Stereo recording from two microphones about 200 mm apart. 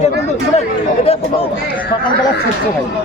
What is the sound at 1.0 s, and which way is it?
Speech, 30° left (ahead or behind).